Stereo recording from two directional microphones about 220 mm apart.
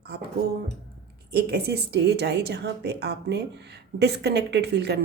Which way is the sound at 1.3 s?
45° right (ahead or behind).